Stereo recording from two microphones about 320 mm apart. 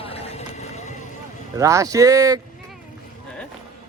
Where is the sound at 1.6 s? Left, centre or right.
Centre.